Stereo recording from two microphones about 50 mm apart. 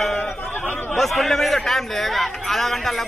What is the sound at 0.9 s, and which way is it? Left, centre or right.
A man's voice, centre.